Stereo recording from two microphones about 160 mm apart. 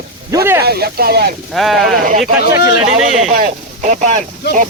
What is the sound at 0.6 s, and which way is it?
Speech, 80° right.